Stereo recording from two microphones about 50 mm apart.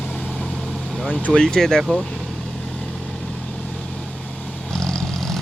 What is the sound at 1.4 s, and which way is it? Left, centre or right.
Speech, centre.